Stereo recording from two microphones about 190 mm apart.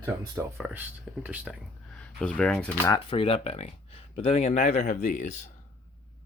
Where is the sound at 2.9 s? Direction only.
30° left (ahead or behind); by 5.3 s 45° left (ahead or behind).